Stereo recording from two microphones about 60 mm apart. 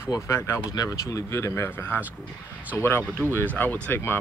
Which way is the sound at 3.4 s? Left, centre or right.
Left.